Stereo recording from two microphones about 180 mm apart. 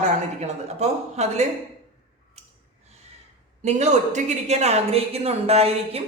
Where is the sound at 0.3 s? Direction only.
40° right (ahead or behind).